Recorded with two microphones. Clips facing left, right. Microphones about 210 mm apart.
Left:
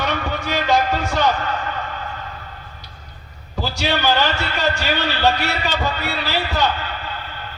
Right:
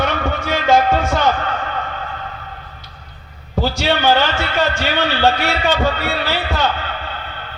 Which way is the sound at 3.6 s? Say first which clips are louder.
Right 4 dB; 55° right (ahead or behind).